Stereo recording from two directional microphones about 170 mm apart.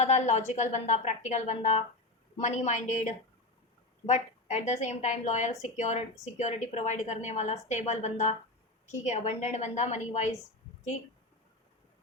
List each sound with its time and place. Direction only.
0.0 s a woman's voice: 40° left (ahead or behind)